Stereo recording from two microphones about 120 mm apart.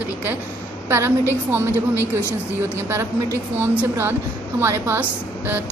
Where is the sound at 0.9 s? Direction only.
20° right (ahead or behind).